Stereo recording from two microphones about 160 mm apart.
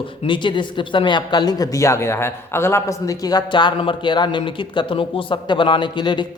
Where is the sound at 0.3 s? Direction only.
30° left (ahead or behind).